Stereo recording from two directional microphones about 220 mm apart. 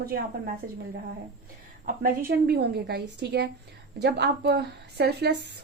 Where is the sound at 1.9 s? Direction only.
40° right (ahead or behind).